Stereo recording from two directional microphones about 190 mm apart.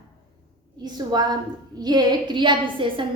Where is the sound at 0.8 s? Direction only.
20° right (ahead or behind).